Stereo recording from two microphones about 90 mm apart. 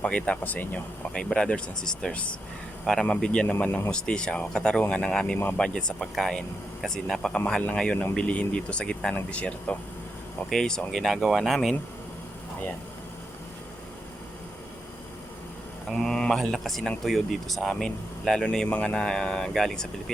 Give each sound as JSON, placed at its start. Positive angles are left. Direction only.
{"t": 0.0, "sound": "speech", "side_deg": 15}
{"t": 3.5, "sound": "speech", "side_deg": 20}
{"t": 3.9, "sound": "speech", "side_deg": 10}
{"t": 15.9, "sound": "speech", "side_deg": 5}